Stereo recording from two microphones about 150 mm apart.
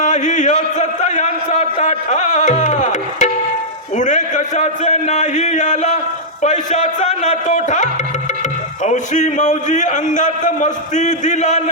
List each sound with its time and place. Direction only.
0.0 s a man's voice: 55° left (ahead or behind)